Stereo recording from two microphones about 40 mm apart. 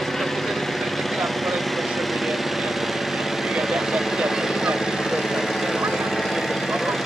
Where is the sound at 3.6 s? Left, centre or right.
Centre.